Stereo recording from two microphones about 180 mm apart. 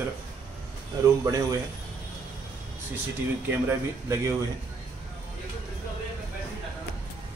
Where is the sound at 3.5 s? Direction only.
15° right (ahead or behind).